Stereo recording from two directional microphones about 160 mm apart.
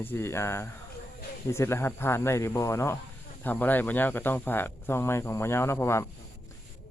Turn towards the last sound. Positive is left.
turn(degrees=15)  # may be behind; listen again after turning